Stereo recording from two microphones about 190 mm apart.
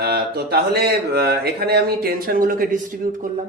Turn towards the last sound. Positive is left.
turn(degrees=-45)  # may be behind; listen again after turning